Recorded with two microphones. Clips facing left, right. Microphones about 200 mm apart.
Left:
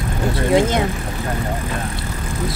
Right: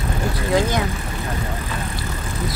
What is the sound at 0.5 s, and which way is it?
Speech, 20° left (ahead or behind).